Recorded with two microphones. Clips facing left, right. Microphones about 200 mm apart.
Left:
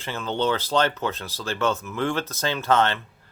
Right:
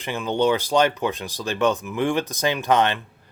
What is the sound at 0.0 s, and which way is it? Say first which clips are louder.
Speech: right 4 dB; 15° right (ahead or behind).